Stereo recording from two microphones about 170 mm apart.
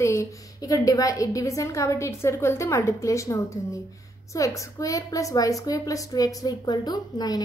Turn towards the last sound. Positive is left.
turn(degrees=25)  # may be behind; listen again after turning